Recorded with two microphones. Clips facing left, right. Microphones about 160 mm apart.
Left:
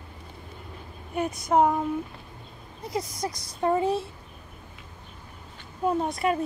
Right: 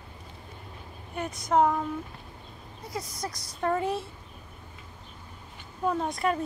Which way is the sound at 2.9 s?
20° left (ahead or behind).